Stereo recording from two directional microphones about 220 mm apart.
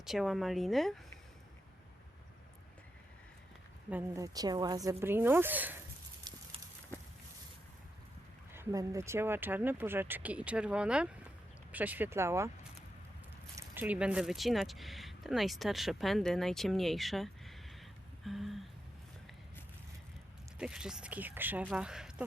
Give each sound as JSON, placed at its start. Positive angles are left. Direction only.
{"t": 0.0, "sound": "speech", "side_deg": 0}
{"t": 3.8, "sound": "speech", "side_deg": -10}
{"t": 6.3, "sound": "a sound", "side_deg": -20}
{"t": 8.5, "sound": "speech", "side_deg": -15}
{"t": 13.6, "sound": "speech", "side_deg": -10}
{"t": 20.6, "sound": "speech", "side_deg": -5}